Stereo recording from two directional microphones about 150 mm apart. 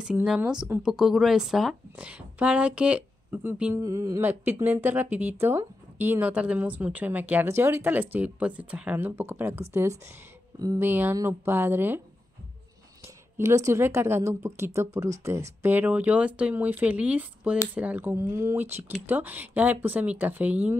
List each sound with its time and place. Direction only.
0.0 s a woman's voice: 5° right (ahead or behind)
3.7 s a woman's voice: 20° right (ahead or behind)
13.4 s a woman's voice: 20° right (ahead or behind)